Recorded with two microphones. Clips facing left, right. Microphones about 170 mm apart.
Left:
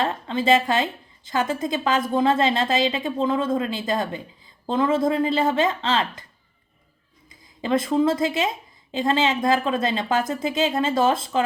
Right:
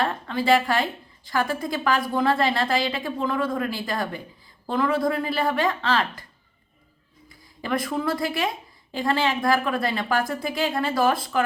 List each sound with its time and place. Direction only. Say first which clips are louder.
0.0 s a woman's voice: left 1 dB; 20° left (ahead or behind)
7.6 s a woman's voice: left 6 dB; 25° left (ahead or behind)